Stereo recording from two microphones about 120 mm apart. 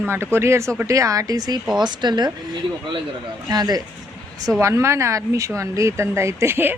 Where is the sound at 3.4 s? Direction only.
35° right (ahead or behind).